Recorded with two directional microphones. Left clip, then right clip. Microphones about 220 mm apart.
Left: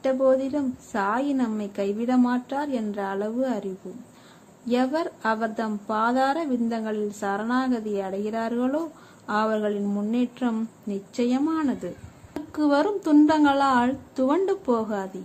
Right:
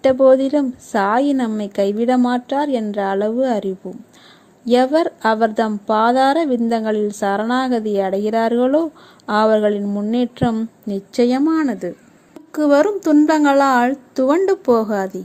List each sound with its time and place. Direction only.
0.0 s a woman's voice: 30° right (ahead or behind)